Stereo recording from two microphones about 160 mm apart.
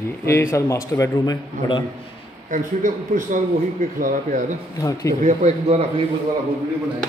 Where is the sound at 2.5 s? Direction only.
55° right (ahead or behind).